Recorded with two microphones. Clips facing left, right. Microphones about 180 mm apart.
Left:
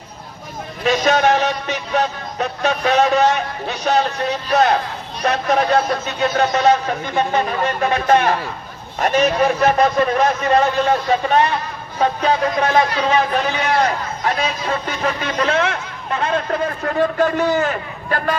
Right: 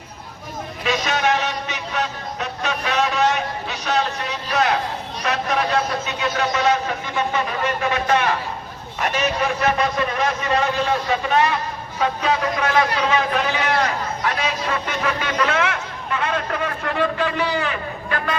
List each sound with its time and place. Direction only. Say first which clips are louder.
0.9 s a sound: left 6 dB; 40° left (ahead or behind)
1.9 s music: left 6 dB; 35° left (ahead or behind)
3.7 s a man's voice: left 6 dB; 40° left (ahead or behind)